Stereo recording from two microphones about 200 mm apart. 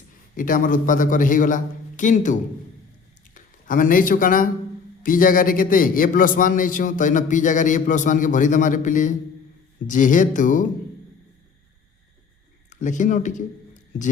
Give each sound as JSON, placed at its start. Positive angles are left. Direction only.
{"t": 0.3, "sound": "a man's voice", "side_deg": 45}
{"t": 12.7, "sound": "a man's voice", "side_deg": 40}